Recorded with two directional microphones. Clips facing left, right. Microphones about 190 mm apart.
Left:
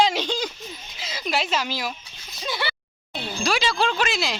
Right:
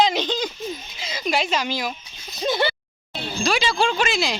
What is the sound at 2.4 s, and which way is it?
Speech, 50° right (ahead or behind).